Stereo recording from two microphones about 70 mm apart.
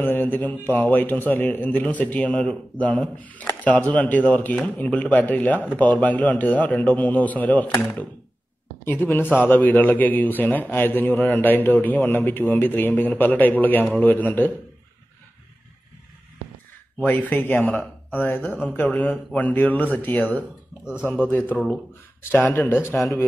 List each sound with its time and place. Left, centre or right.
0.0 s a man's voice: left
8.8 s a man's voice: left
17.0 s a man's voice: left
20.8 s speech: centre
21.2 s a man's voice: left